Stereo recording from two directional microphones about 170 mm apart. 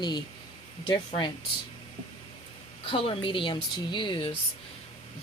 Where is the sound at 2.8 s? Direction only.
30° left (ahead or behind).